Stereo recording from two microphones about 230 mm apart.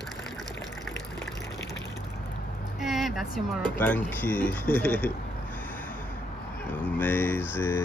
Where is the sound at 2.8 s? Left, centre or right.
Centre.